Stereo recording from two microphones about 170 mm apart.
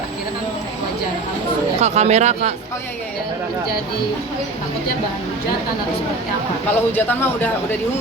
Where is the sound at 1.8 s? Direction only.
40° right (ahead or behind).